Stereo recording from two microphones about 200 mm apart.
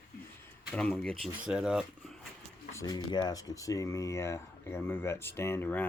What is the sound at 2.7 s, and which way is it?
Speech, 20° left (ahead or behind).